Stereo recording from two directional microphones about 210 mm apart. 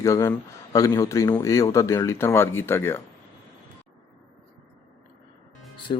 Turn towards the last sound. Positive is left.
turn(degrees=25)  # may be behind; listen again after turning